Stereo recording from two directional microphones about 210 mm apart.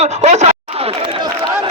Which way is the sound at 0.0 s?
30° right (ahead or behind).